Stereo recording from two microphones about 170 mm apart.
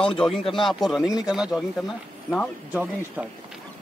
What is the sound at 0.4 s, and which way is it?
Speech, 30° left (ahead or behind).